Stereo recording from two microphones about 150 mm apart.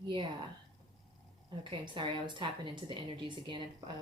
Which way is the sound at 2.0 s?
30° right (ahead or behind).